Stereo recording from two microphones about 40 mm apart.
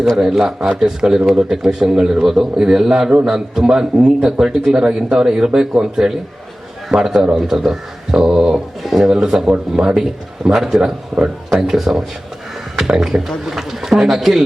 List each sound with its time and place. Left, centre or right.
0.2 s speech: centre
8.5 s speech: centre
9.2 s speech: centre
11.6 s speech: centre